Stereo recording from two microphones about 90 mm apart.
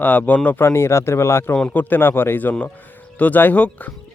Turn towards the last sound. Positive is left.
turn(degrees=15)  # may be behind; listen again after turning